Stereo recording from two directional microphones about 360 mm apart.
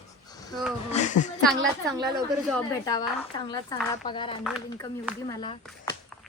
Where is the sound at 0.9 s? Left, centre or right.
Centre.